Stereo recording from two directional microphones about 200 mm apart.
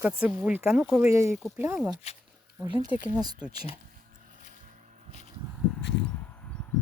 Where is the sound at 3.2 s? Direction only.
20° right (ahead or behind).